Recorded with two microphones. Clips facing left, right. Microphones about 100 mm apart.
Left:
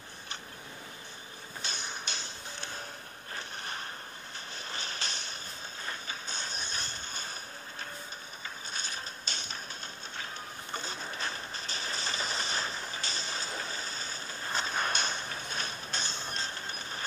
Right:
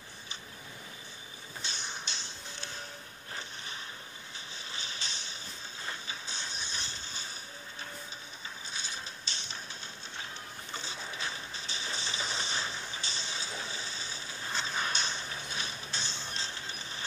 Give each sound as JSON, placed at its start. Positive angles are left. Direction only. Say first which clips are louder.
{"t": 1.6, "sound": "music", "louder": "left 2 dB", "side_deg": 55}
{"t": 3.6, "sound": "a sound", "louder": "left 4 dB", "side_deg": 55}
{"t": 4.6, "sound": "vehicle", "louder": "left 4 dB", "side_deg": 55}
{"t": 6.0, "sound": "music", "louder": "left 2 dB", "side_deg": 50}
{"t": 8.7, "sound": "mechanisms", "louder": "left 1 dB", "side_deg": 55}
{"t": 10.7, "sound": "music", "louder": "left 3 dB", "side_deg": 50}
{"t": 13.0, "sound": "a sound", "louder": "left 2 dB", "side_deg": 45}